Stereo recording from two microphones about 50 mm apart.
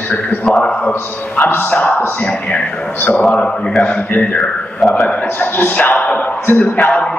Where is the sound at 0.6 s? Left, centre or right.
Left.